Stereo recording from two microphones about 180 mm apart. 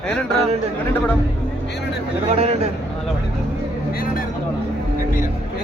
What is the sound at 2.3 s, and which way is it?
Speech, 35° right (ahead or behind).